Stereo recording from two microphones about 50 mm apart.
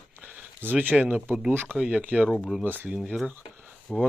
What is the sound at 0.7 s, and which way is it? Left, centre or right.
Speech, right.